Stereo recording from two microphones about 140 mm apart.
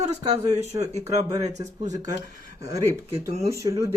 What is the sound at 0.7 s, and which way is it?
Speech, 35° right (ahead or behind).